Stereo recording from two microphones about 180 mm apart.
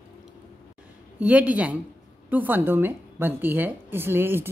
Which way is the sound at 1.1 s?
10° right (ahead or behind).